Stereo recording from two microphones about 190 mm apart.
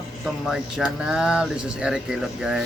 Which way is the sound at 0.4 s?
5° right (ahead or behind).